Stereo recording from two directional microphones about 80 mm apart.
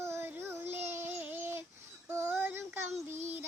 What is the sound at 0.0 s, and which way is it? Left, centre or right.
Child singing, right.